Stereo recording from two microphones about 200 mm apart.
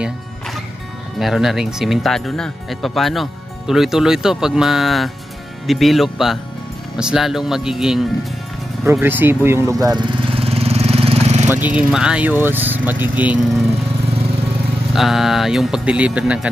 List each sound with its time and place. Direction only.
1.2 s speech: centre (ahead or behind)
8.9 s lawn mower: 10° right (ahead or behind); by 11.4 s 30° right (ahead or behind)
11.4 s speech: 10° right (ahead or behind)
15.0 s speech: centre (ahead or behind)